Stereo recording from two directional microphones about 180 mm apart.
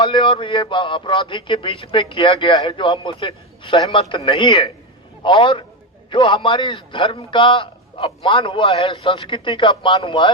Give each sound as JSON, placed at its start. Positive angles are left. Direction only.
{"t": 0.1, "sound": "a man's voice", "side_deg": 30}